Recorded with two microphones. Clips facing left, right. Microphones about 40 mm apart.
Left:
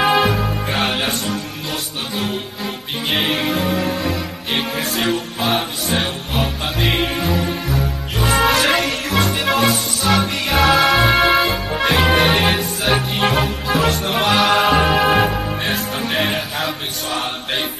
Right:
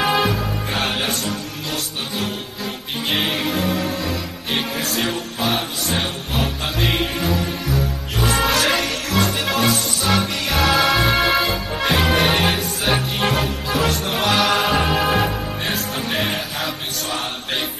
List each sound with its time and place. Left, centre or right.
0.0 s music: centre
4.7 s music: left
5.4 s music: centre
10.0 s music: centre